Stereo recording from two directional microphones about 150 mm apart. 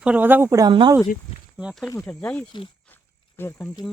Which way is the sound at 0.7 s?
35° right (ahead or behind).